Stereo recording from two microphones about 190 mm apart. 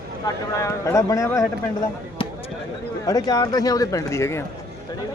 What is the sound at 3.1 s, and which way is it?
Speech, 20° left (ahead or behind).